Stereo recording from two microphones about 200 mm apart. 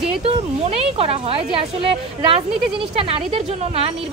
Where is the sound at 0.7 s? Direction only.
30° right (ahead or behind).